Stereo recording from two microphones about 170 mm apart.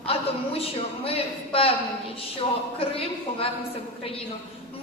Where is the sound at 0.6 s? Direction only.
35° left (ahead or behind).